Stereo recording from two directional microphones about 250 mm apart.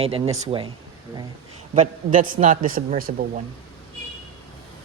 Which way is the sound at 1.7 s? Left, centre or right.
Right.